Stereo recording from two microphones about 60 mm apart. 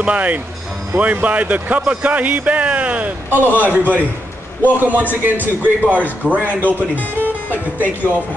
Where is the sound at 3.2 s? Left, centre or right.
Right.